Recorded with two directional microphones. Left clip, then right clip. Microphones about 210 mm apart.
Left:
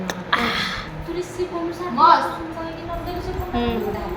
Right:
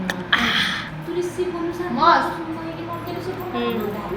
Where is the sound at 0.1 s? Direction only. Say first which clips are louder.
Right 2 dB; 10° left (ahead or behind).